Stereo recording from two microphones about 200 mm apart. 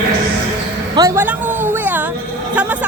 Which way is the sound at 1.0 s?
15° right (ahead or behind).